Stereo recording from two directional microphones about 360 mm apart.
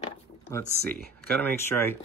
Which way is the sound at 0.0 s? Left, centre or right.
Centre.